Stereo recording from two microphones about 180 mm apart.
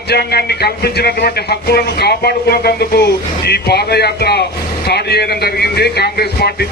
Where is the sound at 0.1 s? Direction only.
60° left (ahead or behind).